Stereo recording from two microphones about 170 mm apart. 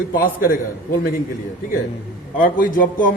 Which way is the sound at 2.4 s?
55° left (ahead or behind).